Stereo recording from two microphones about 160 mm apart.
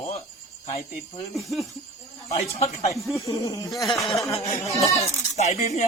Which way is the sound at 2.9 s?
Centre (ahead or behind).